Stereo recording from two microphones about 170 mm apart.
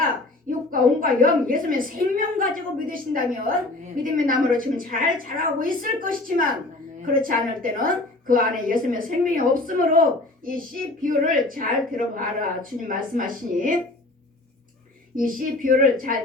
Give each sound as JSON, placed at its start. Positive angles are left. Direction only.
{"t": 0.7, "sound": "a woman's voice", "side_deg": -55}
{"t": 15.1, "sound": "a woman's voice", "side_deg": -55}